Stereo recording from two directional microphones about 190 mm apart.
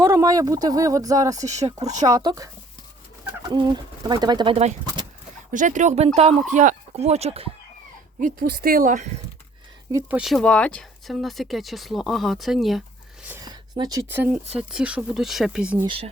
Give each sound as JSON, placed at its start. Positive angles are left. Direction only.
{"t": 0.0, "sound": "speech", "side_deg": -15}
{"t": 3.5, "sound": "speech", "side_deg": -20}
{"t": 5.5, "sound": "speech", "side_deg": -40}
{"t": 8.2, "sound": "speech", "side_deg": -50}
{"t": 9.9, "sound": "speech", "side_deg": -5}
{"t": 13.2, "sound": "a sound", "side_deg": -10}
{"t": 14.1, "sound": "speech", "side_deg": -10}